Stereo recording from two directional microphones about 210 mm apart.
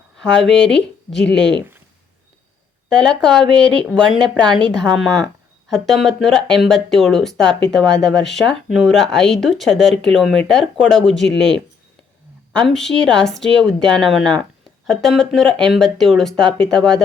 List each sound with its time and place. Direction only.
0.4 s a woman's voice: centre (ahead or behind)
3.0 s a woman's voice: 5° left (ahead or behind)